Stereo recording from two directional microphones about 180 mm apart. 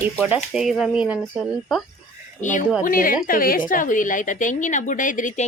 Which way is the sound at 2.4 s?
45° left (ahead or behind).